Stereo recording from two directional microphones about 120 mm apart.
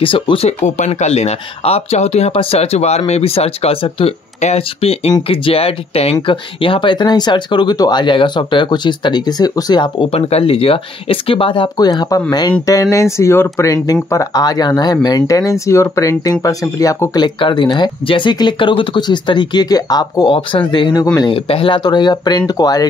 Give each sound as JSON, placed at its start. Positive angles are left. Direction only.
{"t": 0.0, "sound": "speech", "side_deg": 45}
{"t": 0.5, "sound": "speech", "side_deg": 75}
{"t": 5.3, "sound": "speech", "side_deg": 50}
{"t": 10.1, "sound": "speech", "side_deg": 55}
{"t": 14.1, "sound": "speech", "side_deg": 35}
{"t": 20.3, "sound": "speech", "side_deg": 45}
{"t": 21.2, "sound": "speech", "side_deg": 50}